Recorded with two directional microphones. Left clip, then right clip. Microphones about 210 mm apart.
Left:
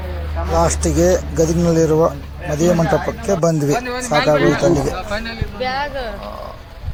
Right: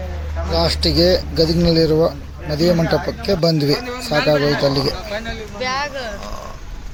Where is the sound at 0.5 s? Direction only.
Centre (ahead or behind).